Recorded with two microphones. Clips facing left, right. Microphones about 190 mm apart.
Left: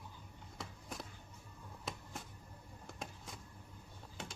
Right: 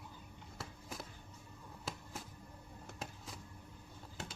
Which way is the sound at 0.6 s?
Centre (ahead or behind).